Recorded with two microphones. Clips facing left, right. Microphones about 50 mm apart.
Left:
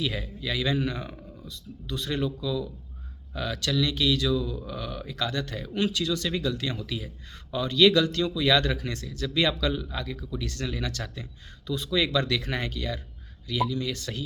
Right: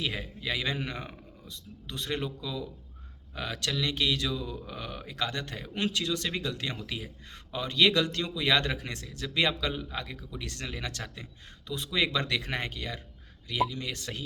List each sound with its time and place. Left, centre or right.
0.0 s speech: right